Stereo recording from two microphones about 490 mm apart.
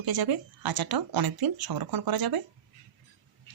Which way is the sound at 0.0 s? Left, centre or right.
Right.